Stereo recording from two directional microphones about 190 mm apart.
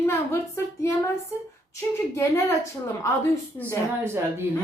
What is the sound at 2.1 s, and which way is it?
A woman's voice, 15° left (ahead or behind).